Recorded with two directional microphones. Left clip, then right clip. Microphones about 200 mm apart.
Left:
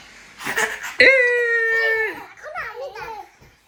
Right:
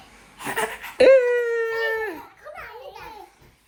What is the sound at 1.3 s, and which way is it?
Howl, 90° right.